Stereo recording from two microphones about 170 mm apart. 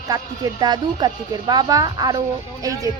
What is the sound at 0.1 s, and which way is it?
A woman's voice, 20° right (ahead or behind).